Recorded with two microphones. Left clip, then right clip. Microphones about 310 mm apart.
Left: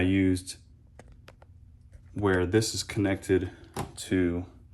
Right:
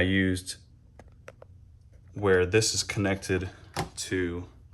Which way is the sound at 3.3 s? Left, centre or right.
Centre.